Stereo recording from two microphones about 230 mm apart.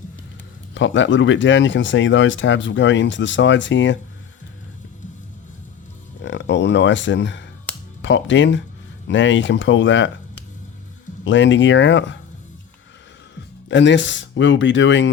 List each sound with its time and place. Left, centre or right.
0.7 s speech: left
6.2 s speech: left
11.2 s speech: left
13.7 s speech: left